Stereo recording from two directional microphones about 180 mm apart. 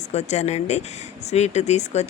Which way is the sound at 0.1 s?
40° left (ahead or behind).